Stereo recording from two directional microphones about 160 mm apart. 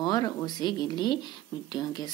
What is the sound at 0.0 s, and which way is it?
Speech, 25° left (ahead or behind).